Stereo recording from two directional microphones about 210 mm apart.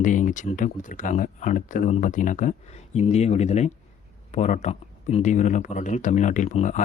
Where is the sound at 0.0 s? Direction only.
40° left (ahead or behind).